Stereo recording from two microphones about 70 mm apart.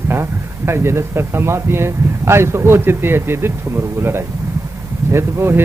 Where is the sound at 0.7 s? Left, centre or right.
Right.